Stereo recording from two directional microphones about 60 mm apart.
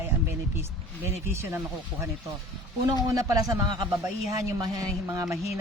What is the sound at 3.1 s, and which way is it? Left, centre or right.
Speech, right.